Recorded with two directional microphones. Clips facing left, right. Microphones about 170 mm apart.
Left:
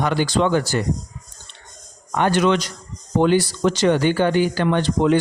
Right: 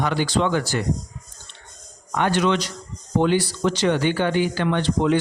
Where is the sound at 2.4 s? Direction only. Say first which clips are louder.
Left 3 dB; 50° left (ahead or behind).